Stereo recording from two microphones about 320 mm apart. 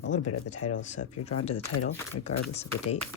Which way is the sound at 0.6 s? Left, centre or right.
Left.